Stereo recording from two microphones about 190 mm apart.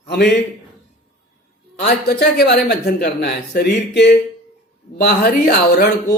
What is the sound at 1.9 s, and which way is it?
Speech, 55° left (ahead or behind).